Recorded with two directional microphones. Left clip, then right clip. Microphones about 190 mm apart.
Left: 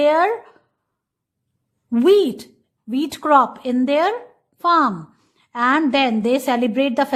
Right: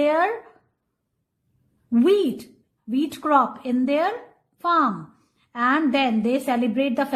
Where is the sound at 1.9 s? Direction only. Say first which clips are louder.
Left 5 dB; 20° left (ahead or behind).